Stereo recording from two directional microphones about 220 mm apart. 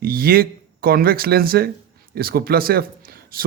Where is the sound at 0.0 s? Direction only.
40° right (ahead or behind).